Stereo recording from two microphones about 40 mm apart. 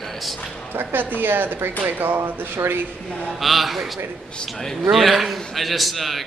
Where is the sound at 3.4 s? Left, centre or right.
Centre.